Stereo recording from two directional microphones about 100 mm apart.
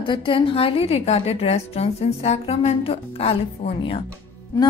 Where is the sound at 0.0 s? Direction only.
55° left (ahead or behind); by 4.0 s 75° left (ahead or behind).